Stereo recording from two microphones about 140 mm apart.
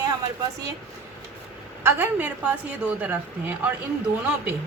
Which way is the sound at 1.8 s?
15° right (ahead or behind).